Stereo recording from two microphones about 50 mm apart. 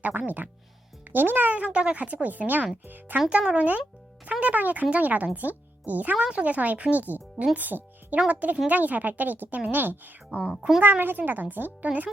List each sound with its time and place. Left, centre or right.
0.0 s speech: right
1.5 s speech: right
3.2 s speech: right